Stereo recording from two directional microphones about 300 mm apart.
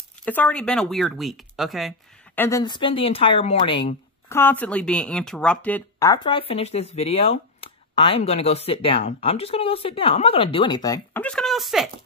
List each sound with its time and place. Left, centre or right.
0.2 s speech: centre